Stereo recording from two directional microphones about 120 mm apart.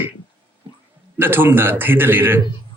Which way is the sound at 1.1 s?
15° right (ahead or behind).